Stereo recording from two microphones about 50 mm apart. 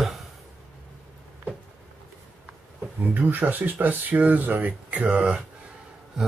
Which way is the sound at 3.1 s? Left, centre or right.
Right.